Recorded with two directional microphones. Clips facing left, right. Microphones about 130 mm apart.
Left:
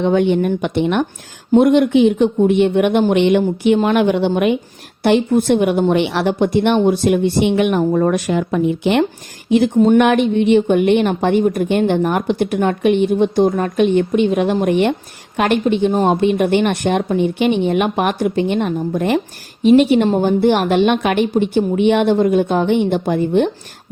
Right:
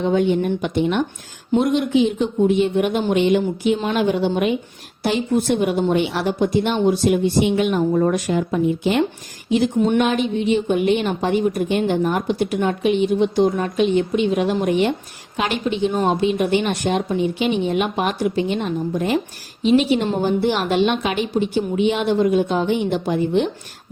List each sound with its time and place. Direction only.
0.0 s a woman's voice: 65° left (ahead or behind)